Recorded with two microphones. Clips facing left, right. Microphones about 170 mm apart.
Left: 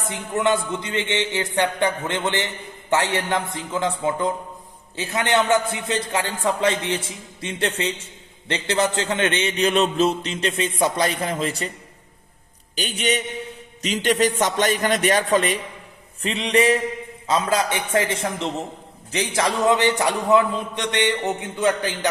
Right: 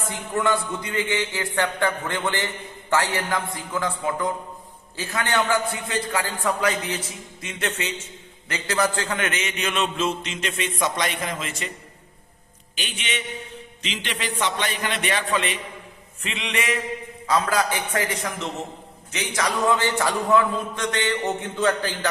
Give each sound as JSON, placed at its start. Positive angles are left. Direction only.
{"t": 0.1, "sound": "a man's voice", "side_deg": 20}
{"t": 12.7, "sound": "a man's voice", "side_deg": 40}